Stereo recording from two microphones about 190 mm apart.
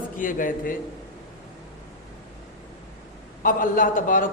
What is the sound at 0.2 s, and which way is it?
Speech, 45° left (ahead or behind).